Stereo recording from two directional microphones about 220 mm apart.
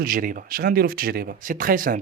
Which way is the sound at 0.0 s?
40° right (ahead or behind).